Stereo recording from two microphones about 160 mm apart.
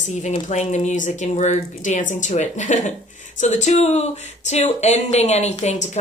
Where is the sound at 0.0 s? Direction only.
45° left (ahead or behind).